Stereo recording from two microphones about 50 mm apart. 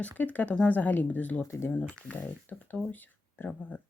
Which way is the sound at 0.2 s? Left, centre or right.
Left.